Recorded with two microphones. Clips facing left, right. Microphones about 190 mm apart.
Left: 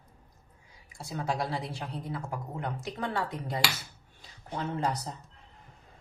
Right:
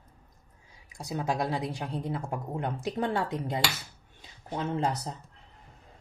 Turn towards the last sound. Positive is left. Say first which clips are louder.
# right 2 dB
turn(degrees=-25)  # may be behind; listen again after turning